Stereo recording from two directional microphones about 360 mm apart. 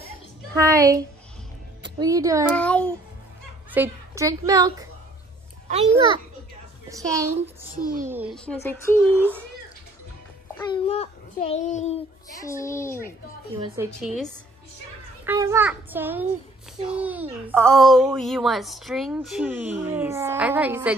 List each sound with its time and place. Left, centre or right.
0.6 s a child's voice: centre
2.5 s a child's voice: centre
3.7 s a child's voice: centre
9.1 s a child's voice: centre
10.6 s a child's voice: centre
13.7 s a child's voice: centre